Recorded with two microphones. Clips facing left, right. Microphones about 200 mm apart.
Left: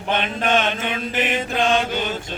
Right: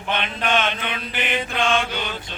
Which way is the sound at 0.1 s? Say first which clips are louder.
Left 3 dB; 45° left (ahead or behind).